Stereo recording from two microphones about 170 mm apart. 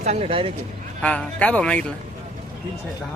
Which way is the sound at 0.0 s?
35° right (ahead or behind).